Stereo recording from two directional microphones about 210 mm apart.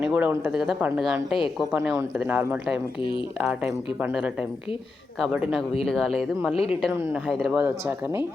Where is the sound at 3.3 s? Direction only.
5° right (ahead or behind).